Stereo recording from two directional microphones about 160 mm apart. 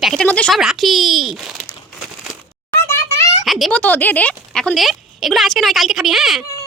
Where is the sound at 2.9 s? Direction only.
15° left (ahead or behind).